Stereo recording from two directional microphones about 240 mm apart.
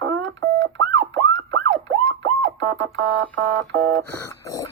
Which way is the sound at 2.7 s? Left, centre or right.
Right.